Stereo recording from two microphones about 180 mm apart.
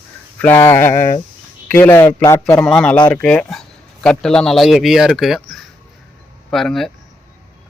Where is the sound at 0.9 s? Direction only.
40° left (ahead or behind).